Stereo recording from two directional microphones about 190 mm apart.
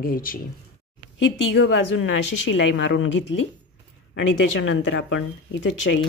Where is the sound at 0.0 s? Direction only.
50° left (ahead or behind).